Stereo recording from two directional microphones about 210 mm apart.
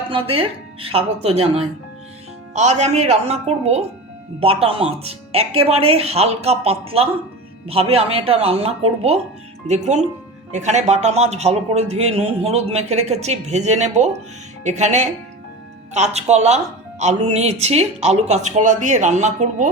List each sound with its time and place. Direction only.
0.1 s a man's voice: 25° right (ahead or behind)